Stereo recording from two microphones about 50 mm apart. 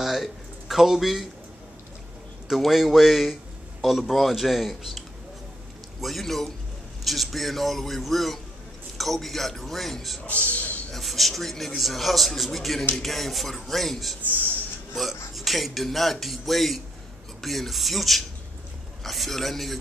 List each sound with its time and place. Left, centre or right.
0.0 s speech: centre
2.4 s a man's voice: centre
10.2 s speech: left
10.9 s a man's voice: centre